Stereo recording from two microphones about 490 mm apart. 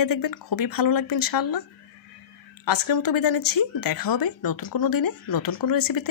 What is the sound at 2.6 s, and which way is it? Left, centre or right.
Speech, left.